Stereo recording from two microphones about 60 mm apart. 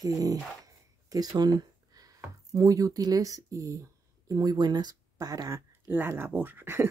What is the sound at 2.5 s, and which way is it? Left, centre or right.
Speech, right.